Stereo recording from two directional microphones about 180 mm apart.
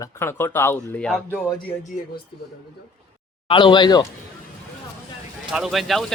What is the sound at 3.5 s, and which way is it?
Speech, 25° left (ahead or behind).